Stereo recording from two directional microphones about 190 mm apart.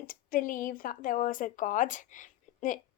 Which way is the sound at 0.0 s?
45° left (ahead or behind).